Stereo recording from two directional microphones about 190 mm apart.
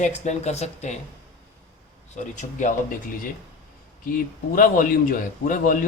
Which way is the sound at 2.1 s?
40° left (ahead or behind).